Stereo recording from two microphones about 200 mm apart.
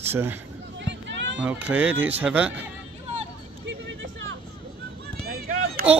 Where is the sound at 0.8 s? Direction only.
65° right (ahead or behind).